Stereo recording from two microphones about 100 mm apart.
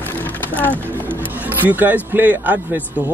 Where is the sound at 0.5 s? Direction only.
15° left (ahead or behind).